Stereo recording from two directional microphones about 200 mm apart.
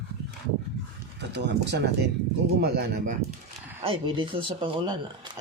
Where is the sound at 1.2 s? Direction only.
60° right (ahead or behind).